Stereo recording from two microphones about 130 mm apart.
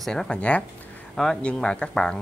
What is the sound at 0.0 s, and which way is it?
Speech, 5° left (ahead or behind).